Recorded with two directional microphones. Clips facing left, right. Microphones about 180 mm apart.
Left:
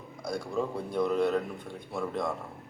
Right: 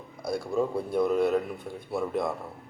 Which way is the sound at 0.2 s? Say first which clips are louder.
Right 4 dB; 5° right (ahead or behind).